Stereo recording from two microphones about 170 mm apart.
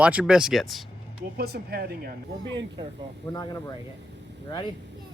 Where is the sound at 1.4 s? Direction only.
65° right (ahead or behind).